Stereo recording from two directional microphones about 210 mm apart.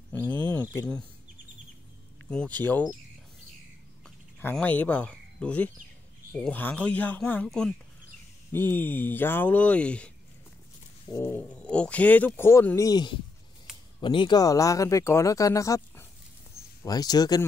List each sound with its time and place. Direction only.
0.1 s speech: 10° left (ahead or behind)
2.3 s speech: 5° left (ahead or behind)
4.4 s speech: 10° left (ahead or behind)
11.1 s speech: 10° left (ahead or behind)